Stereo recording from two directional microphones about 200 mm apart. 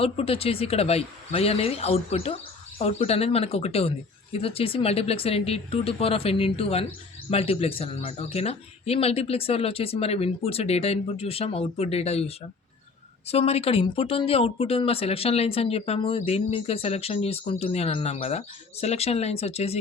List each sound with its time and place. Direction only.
0.0 s speech: 30° left (ahead or behind)